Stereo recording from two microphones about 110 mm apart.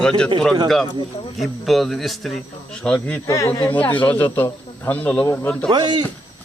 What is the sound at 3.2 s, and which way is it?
Speech, 30° left (ahead or behind).